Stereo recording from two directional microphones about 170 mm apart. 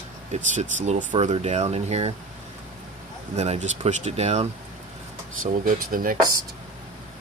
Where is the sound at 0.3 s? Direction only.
45° right (ahead or behind).